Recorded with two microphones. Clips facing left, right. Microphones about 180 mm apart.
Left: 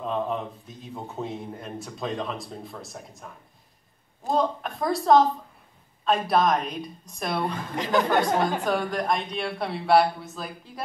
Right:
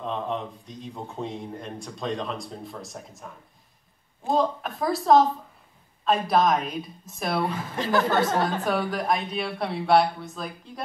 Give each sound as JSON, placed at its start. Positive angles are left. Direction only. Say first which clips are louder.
{"t": 0.0, "sound": "a man's voice", "louder": "left 2 dB", "side_deg": 5}
{"t": 4.3, "sound": "a man's voice", "louder": "right 1 dB", "side_deg": 0}
{"t": 7.7, "sound": "speech", "louder": "left 1 dB", "side_deg": 20}
{"t": 8.6, "sound": "a man's voice", "louder": "even", "side_deg": 0}